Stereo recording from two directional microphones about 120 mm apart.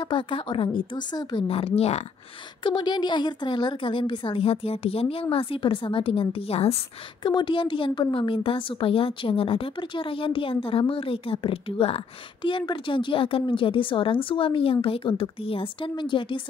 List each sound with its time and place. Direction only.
0.0 s a woman's voice: 45° left (ahead or behind)
1.5 s a woman's voice: 55° left (ahead or behind)
2.6 s a woman's voice: 40° left (ahead or behind); by 6.8 s 60° left (ahead or behind)
7.2 s a woman's voice: 40° left (ahead or behind)